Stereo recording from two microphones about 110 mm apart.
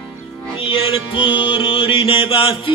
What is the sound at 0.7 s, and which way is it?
Music, 55° left (ahead or behind).